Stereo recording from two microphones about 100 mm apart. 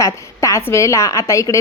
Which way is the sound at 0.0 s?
30° left (ahead or behind).